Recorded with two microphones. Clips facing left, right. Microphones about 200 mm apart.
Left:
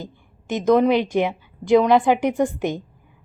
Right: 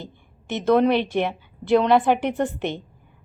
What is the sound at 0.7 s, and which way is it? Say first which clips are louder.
A woman's voice: left 2 dB; 5° left (ahead or behind).